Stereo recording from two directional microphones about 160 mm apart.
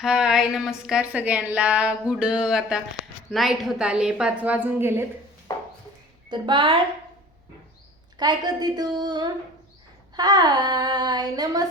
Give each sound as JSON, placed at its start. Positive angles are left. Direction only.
{"t": 0.0, "sound": "a woman's voice", "side_deg": -5}
{"t": 5.5, "sound": "a sound", "side_deg": 25}
{"t": 6.3, "sound": "child singing", "side_deg": -30}
{"t": 8.2, "sound": "child singing", "side_deg": -25}